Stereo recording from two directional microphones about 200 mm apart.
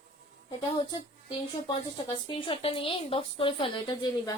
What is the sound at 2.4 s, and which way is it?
A woman's voice, 25° left (ahead or behind).